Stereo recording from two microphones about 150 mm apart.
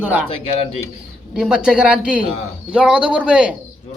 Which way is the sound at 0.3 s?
45° left (ahead or behind).